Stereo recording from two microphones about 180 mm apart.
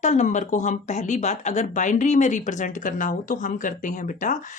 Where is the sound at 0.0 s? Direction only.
40° left (ahead or behind).